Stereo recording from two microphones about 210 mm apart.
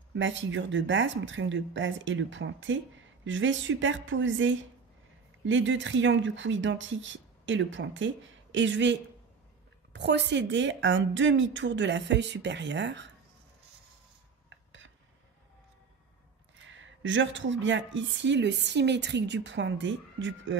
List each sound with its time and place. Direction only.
0.1 s a woman's voice: 60° right (ahead or behind)
9.9 s a woman's voice: 55° right (ahead or behind)
14.5 s a sound: 60° right (ahead or behind)
16.7 s a woman's voice: 65° right (ahead or behind)